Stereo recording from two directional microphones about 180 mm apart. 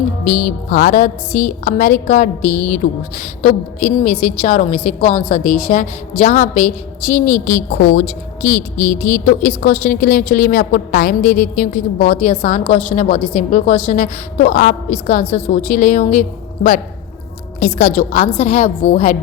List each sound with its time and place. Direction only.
0.3 s a woman's voice: 45° left (ahead or behind)
7.3 s a woman's voice: 15° left (ahead or behind)
7.9 s a woman's voice: 45° left (ahead or behind)
17.6 s a woman's voice: 40° left (ahead or behind)